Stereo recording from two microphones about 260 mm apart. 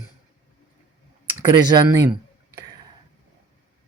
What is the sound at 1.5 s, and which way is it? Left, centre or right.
Speech, centre.